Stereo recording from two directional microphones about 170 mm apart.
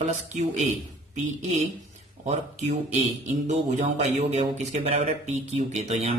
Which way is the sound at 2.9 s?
45° right (ahead or behind).